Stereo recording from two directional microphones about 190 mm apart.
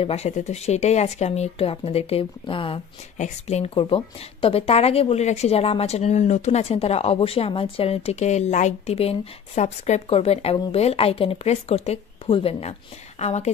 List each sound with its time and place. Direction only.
0.0 s speech: 35° left (ahead or behind)